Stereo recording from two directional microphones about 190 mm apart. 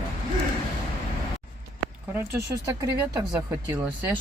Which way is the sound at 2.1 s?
15° right (ahead or behind).